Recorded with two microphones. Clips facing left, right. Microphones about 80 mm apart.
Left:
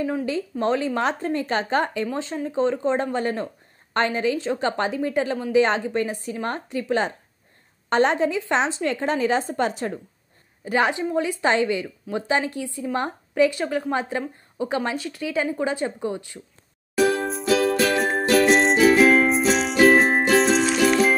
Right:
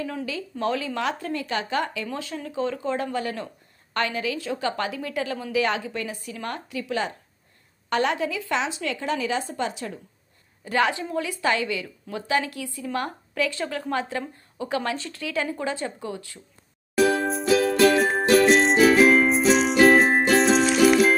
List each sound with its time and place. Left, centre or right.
0.0 s a woman's voice: left
2.1 s a woman's voice: left
10.6 s a woman's voice: left
17.1 s music: centre